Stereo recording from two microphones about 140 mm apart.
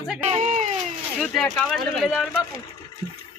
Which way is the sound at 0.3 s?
50° right (ahead or behind).